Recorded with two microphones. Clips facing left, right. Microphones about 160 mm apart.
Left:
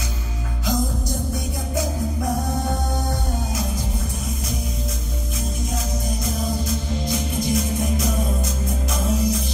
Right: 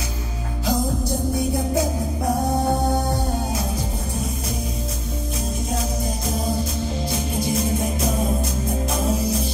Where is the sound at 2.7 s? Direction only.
30° right (ahead or behind).